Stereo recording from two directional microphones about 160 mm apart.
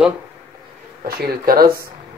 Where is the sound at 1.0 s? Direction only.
70° right (ahead or behind).